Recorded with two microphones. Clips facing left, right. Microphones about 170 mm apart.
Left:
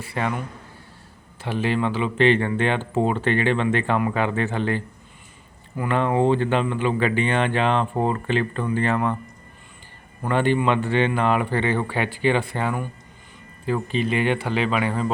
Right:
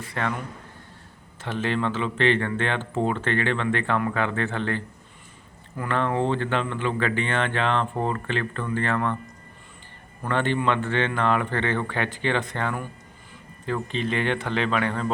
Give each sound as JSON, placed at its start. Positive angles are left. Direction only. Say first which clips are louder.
{"t": 0.0, "sound": "speech", "louder": "left 2 dB", "side_deg": 10}
{"t": 1.4, "sound": "speech", "louder": "left 3 dB", "side_deg": 10}
{"t": 10.2, "sound": "speech", "louder": "left 3 dB", "side_deg": 10}